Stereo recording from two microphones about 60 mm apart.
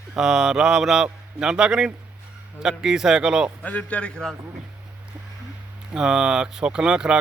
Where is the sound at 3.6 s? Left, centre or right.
Left.